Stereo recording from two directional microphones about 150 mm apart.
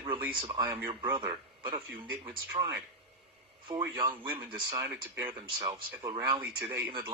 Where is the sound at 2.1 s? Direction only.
30° right (ahead or behind).